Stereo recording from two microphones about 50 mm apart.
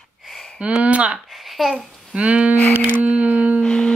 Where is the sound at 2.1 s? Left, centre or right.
Right.